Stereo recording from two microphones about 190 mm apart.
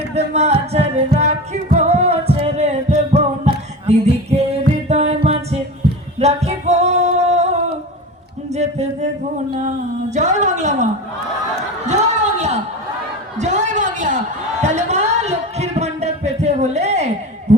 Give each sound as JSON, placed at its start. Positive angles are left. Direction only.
{"t": 0.1, "sound": "music", "side_deg": -35}
{"t": 6.1, "sound": "singing", "side_deg": -35}
{"t": 8.5, "sound": "a sound", "side_deg": -35}
{"t": 9.6, "sound": "speech", "side_deg": -40}
{"t": 11.5, "sound": "chatter", "side_deg": -35}
{"t": 13.4, "sound": "a sound", "side_deg": -40}